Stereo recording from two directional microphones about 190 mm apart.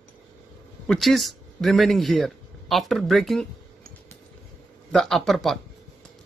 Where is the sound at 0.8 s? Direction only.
Centre (ahead or behind).